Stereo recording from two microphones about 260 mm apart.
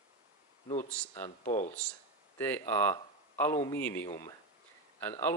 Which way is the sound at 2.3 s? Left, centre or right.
Centre.